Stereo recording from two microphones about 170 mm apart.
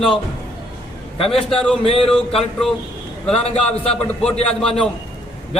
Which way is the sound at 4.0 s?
5° left (ahead or behind).